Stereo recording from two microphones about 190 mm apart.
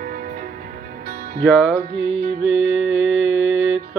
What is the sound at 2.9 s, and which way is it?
Mantra, 80° right.